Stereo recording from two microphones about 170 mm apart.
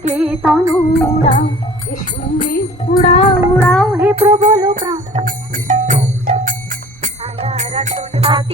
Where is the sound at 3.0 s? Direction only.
35° left (ahead or behind).